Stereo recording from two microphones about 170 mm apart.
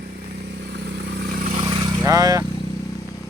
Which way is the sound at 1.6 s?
20° right (ahead or behind).